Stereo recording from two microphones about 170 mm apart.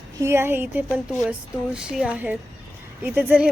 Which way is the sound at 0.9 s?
Centre (ahead or behind).